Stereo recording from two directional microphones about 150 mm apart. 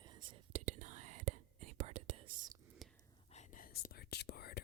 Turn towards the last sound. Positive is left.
turn(degrees=90)